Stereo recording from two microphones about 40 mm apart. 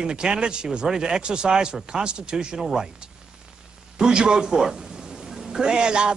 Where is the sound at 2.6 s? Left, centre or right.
Centre.